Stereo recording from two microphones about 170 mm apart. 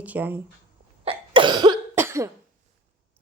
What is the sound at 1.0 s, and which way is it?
Cough, 30° right (ahead or behind).